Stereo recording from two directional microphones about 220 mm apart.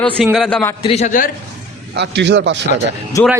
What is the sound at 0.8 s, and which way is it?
Speech, 30° left (ahead or behind).